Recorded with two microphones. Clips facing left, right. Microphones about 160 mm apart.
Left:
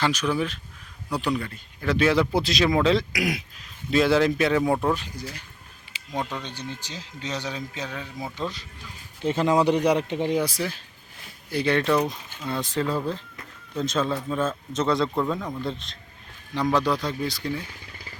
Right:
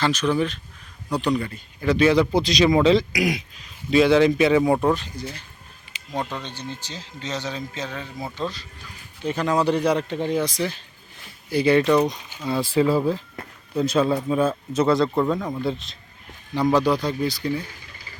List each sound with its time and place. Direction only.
0.0 s a man's voice: 10° left (ahead or behind)
4.9 s a man's voice: 10° left (ahead or behind)
6.4 s a man's voice: 15° left (ahead or behind)
9.2 s speech: 25° left (ahead or behind)
10.3 s speech: 5° left (ahead or behind)
12.5 s speech: 10° right (ahead or behind)